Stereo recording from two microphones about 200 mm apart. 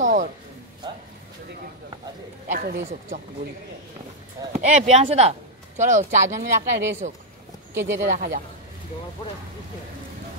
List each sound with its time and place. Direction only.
0.0 s music: 40° right (ahead or behind)
2.4 s a sound: 40° right (ahead or behind)
4.5 s speech: 35° right (ahead or behind)
6.2 s speech: 15° right (ahead or behind)
7.8 s speech: 65° right (ahead or behind)
8.1 s a woman's voice: 45° right (ahead or behind)